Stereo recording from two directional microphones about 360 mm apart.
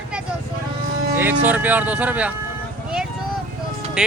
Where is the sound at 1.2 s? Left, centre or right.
Centre.